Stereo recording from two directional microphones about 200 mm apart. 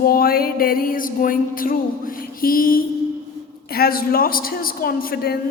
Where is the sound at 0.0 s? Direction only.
50° left (ahead or behind).